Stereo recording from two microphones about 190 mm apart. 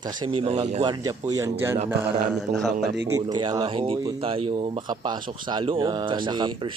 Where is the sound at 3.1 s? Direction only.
20° right (ahead or behind).